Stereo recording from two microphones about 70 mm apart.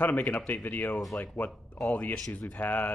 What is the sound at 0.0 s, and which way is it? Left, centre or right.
Speech, left.